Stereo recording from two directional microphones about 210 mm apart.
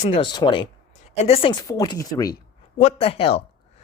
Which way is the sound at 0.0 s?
25° left (ahead or behind).